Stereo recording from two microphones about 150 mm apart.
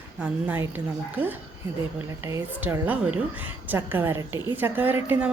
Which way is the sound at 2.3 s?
20° right (ahead or behind).